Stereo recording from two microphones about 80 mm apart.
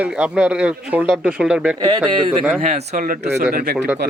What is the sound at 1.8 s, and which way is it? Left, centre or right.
Speech, right.